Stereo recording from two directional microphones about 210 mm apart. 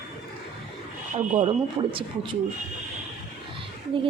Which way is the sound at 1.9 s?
25° right (ahead or behind).